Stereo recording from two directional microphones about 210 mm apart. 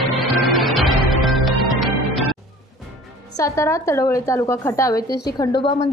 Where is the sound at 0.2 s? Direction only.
Centre (ahead or behind).